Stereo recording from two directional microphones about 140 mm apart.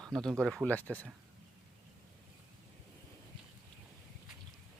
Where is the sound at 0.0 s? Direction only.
5° left (ahead or behind).